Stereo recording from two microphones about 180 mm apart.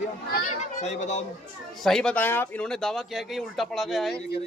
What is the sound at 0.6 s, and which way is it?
Speech, 40° left (ahead or behind).